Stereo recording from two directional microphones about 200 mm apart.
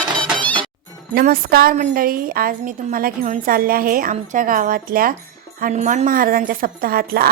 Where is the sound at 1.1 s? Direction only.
50° right (ahead or behind).